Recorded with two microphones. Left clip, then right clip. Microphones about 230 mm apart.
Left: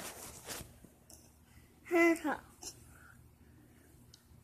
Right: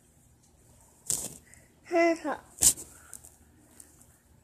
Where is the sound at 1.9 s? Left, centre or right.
Left.